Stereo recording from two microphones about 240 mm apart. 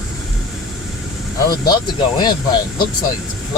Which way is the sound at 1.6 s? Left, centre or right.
Centre.